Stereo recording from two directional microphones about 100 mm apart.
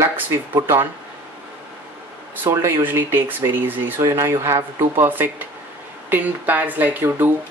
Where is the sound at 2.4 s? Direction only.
30° right (ahead or behind).